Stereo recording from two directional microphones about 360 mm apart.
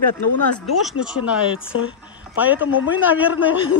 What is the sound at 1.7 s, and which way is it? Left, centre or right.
Speech, left.